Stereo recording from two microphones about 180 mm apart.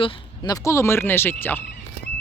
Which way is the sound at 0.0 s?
20° left (ahead or behind).